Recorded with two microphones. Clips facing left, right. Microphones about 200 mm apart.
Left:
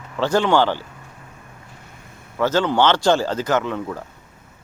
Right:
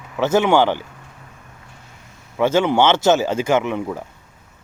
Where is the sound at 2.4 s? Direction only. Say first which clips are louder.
Right 2 dB; 15° right (ahead or behind).